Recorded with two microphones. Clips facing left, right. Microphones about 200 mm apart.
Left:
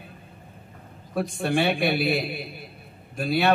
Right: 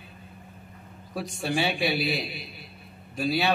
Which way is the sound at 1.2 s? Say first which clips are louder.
Left 4 dB; 55° left (ahead or behind).